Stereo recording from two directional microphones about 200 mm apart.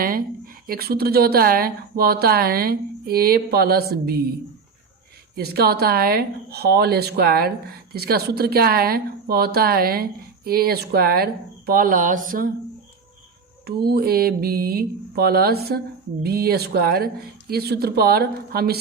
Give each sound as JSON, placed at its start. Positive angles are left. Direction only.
{"t": 0.7, "sound": "a woman's voice", "side_deg": -50}
{"t": 5.3, "sound": "a woman's voice", "side_deg": -50}
{"t": 13.7, "sound": "a woman's voice", "side_deg": -50}